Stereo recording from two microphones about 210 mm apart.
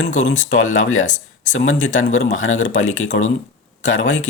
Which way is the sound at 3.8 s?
35° left (ahead or behind).